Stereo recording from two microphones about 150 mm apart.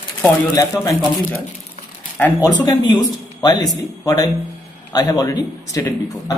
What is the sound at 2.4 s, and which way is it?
Speech, 25° left (ahead or behind).